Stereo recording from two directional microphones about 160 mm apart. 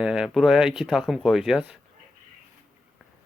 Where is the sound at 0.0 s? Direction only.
5° right (ahead or behind).